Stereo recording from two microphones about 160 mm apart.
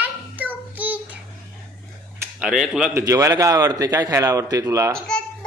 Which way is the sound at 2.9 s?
20° right (ahead or behind).